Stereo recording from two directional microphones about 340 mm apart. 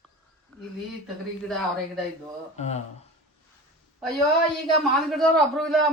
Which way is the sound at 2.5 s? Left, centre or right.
Centre.